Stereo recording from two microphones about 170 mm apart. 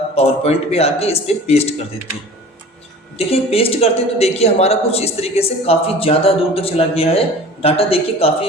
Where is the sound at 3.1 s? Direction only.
35° left (ahead or behind).